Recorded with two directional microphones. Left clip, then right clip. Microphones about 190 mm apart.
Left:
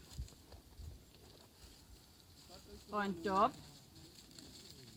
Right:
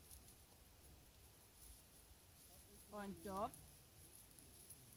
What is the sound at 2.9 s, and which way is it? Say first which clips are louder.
Speech: left 14 dB; 45° right (ahead or behind).